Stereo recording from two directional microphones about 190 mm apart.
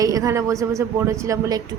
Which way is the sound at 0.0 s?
20° right (ahead or behind).